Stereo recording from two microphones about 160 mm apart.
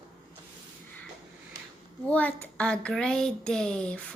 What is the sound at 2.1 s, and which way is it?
A woman's voice, 10° left (ahead or behind).